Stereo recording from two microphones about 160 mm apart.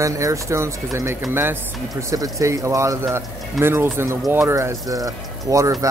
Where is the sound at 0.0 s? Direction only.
20° right (ahead or behind).